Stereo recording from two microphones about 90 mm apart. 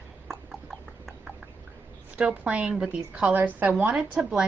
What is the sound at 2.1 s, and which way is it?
A woman's voice, 10° right (ahead or behind).